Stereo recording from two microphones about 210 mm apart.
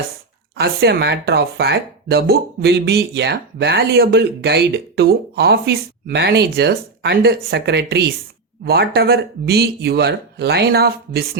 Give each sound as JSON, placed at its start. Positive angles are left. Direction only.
{"t": 0.5, "sound": "speech", "side_deg": -50}